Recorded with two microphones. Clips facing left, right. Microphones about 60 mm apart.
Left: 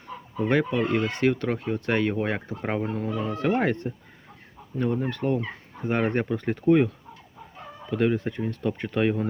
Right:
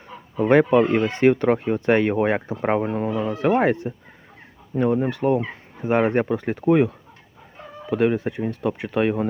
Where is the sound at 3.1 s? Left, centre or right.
Centre.